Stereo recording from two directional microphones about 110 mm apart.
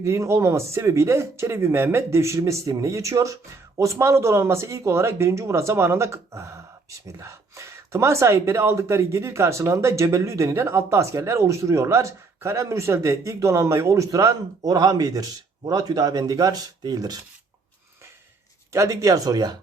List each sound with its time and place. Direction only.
0.0 s speech: 25° right (ahead or behind)
18.7 s speech: 30° right (ahead or behind)